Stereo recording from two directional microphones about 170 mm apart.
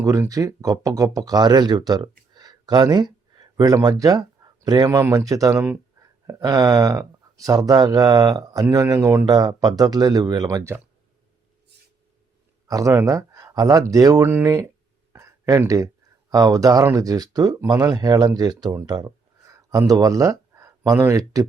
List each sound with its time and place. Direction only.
0.0 s speech: 20° right (ahead or behind)
12.6 s speech: 20° right (ahead or behind)
15.1 s a sound: 20° right (ahead or behind)
16.3 s speech: 20° right (ahead or behind)